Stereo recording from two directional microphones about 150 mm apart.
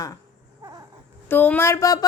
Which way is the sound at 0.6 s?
20° right (ahead or behind).